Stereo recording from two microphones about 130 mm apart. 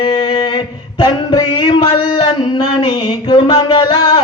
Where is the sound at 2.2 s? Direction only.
40° left (ahead or behind).